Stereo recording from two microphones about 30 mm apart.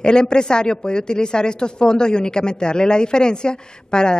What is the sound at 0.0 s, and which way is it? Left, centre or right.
A man's voice, left.